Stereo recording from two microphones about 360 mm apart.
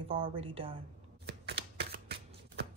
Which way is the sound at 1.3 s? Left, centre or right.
Right.